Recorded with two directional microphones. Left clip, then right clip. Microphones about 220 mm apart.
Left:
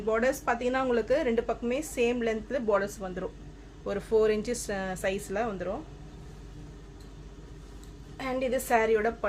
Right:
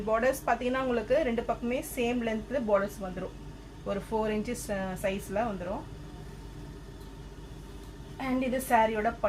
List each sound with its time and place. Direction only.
0.1 s a woman's voice: 30° left (ahead or behind)
8.2 s speech: 50° left (ahead or behind)